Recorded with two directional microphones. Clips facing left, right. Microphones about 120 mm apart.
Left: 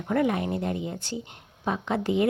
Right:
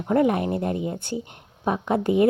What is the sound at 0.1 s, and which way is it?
Speech, 40° right (ahead or behind).